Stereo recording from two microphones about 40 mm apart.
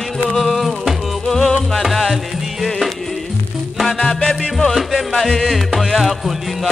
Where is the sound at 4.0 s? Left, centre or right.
Left.